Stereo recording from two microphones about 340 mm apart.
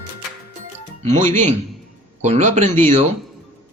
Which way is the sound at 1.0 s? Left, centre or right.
Right.